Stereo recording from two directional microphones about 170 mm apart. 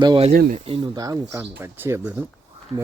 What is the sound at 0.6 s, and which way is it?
Speech, 30° right (ahead or behind).